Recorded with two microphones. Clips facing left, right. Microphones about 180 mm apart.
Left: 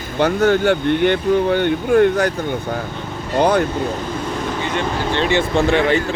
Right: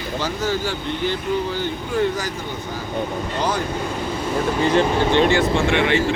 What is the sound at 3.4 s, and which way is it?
Speech, 60° left (ahead or behind).